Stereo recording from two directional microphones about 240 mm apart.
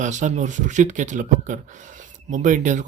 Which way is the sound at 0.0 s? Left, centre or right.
Right.